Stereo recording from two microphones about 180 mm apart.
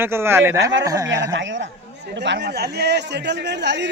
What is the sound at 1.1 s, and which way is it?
Speech, 90° right.